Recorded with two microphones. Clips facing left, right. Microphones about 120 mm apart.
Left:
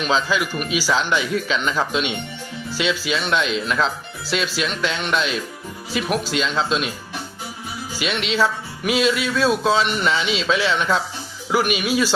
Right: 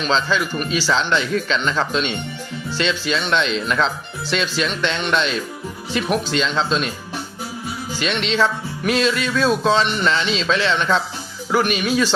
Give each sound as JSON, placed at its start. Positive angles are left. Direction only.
{"t": 0.0, "sound": "speech", "side_deg": 10}
{"t": 7.9, "sound": "speech", "side_deg": 5}